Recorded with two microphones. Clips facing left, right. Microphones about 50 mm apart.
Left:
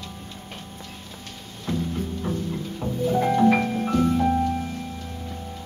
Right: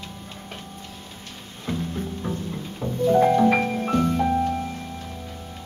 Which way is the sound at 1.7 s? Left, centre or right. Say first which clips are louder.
Left 1 dB; centre.